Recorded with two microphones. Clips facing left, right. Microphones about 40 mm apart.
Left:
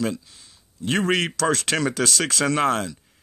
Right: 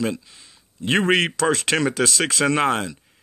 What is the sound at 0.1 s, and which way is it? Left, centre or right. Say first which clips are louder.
Speech: right 2 dB; right.